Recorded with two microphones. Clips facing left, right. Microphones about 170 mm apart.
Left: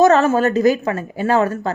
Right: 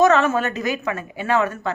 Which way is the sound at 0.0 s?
35° left (ahead or behind).